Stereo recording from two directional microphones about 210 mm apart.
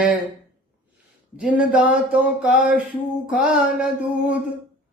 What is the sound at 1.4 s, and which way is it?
Music, 5° right (ahead or behind).